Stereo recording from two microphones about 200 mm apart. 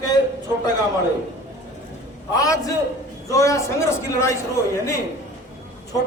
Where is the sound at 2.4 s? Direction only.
15° left (ahead or behind).